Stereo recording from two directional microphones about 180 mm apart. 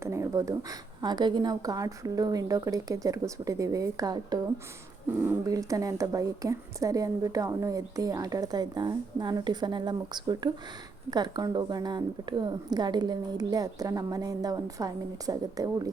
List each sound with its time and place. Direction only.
0.0 s a woman's voice: 15° right (ahead or behind)